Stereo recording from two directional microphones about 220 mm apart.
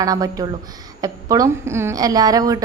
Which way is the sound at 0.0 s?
15° right (ahead or behind).